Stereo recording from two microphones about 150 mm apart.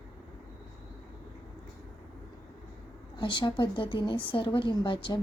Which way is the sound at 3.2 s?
35° left (ahead or behind).